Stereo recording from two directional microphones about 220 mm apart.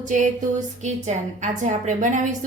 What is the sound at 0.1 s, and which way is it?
A woman's voice, 35° right (ahead or behind).